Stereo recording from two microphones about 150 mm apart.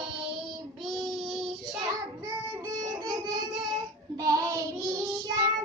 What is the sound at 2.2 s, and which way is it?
Music, 25° right (ahead or behind).